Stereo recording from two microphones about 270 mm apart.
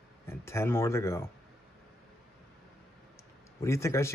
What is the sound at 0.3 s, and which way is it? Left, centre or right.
Speech, centre.